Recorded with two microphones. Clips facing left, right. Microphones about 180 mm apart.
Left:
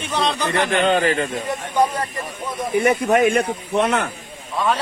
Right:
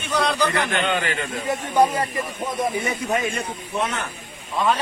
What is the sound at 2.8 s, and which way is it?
Speech, 65° left (ahead or behind).